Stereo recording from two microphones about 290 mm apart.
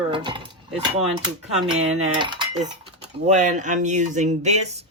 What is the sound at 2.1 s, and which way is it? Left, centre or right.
Speech, centre.